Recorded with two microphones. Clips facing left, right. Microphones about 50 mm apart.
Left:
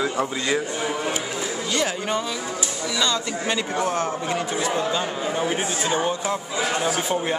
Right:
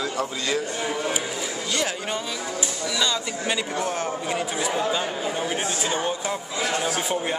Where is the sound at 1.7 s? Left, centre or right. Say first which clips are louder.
Left 3 dB; centre.